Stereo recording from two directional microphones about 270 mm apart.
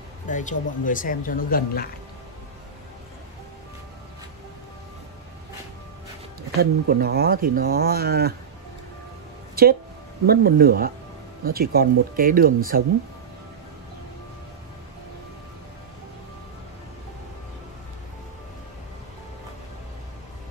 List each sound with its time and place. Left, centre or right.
0.3 s speech: left
6.6 s speech: right
10.2 s speech: right